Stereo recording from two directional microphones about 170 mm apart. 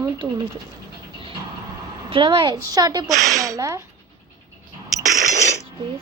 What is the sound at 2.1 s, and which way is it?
Speech, 30° right (ahead or behind).